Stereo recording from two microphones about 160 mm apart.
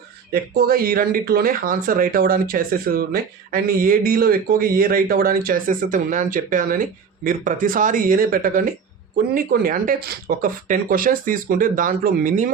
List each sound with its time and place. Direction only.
0.3 s speech: 75° right (ahead or behind); by 12.5 s 60° right (ahead or behind)